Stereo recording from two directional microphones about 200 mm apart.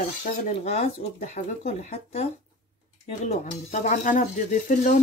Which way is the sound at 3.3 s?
40° left (ahead or behind).